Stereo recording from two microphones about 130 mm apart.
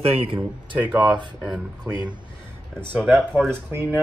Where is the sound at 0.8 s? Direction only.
10° right (ahead or behind).